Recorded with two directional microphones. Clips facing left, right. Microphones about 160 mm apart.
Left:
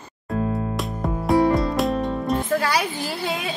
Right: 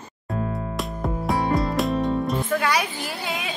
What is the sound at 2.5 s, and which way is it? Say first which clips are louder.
Speech: left 1 dB; 35° left (ahead or behind).